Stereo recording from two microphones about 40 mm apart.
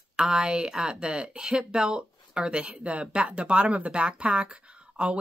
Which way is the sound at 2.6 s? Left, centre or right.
Right.